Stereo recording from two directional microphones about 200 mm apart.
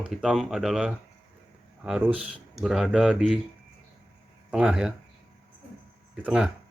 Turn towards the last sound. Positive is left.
turn(degrees=-5)  # may be behind; listen again after turning